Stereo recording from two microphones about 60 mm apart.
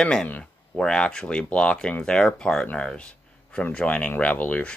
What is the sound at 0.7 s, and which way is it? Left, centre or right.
Speech, centre.